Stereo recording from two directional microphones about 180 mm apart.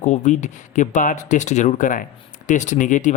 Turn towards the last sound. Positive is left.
turn(degrees=45)  # may be behind; listen again after turning